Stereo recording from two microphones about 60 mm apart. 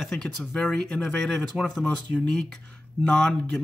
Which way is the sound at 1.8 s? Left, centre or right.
Centre.